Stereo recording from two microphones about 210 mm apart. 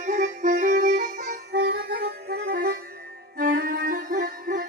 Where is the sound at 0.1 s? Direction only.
35° right (ahead or behind).